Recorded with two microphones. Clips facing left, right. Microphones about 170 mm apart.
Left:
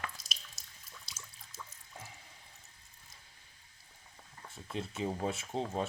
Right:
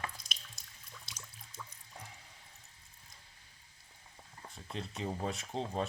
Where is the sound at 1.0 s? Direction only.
5° left (ahead or behind).